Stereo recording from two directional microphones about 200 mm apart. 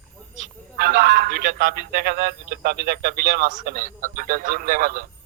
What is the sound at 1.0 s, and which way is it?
A man's voice, 55° right (ahead or behind).